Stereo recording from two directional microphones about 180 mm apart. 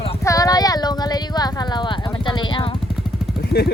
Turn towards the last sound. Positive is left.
turn(degrees=65)  # may be behind; listen again after turning